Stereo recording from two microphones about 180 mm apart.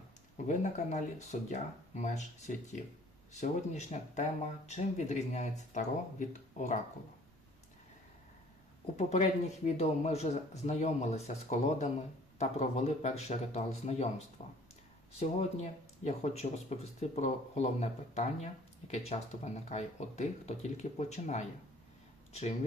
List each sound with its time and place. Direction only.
0.4 s speech: 40° left (ahead or behind)
9.0 s speech: 40° left (ahead or behind)